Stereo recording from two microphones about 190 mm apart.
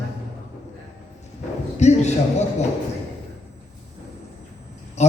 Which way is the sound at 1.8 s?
35° left (ahead or behind).